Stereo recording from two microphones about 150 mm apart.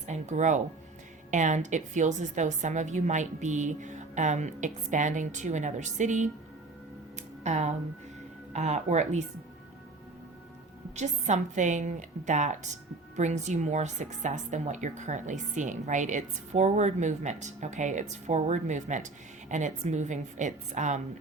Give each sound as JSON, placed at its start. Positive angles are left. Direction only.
{"t": 0.1, "sound": "a woman's voice", "side_deg": -55}
{"t": 7.4, "sound": "a woman's voice", "side_deg": -50}
{"t": 10.9, "sound": "a woman's voice", "side_deg": -50}